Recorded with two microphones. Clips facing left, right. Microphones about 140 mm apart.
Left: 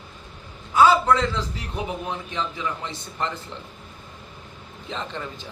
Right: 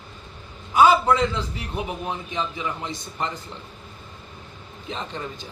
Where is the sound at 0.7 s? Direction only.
15° right (ahead or behind).